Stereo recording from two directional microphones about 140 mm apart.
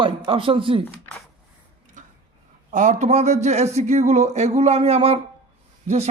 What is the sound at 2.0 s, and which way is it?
Tick-tock, 65° right (ahead or behind).